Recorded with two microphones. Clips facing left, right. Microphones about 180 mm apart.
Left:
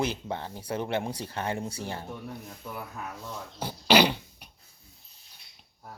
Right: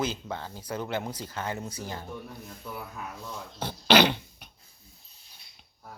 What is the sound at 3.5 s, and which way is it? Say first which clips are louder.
Dog: even; 10° left (ahead or behind).